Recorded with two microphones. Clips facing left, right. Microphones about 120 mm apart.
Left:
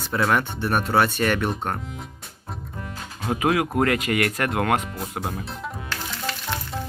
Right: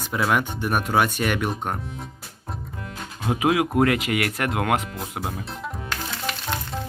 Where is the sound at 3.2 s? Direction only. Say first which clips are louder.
Right 1 dB; 10° right (ahead or behind).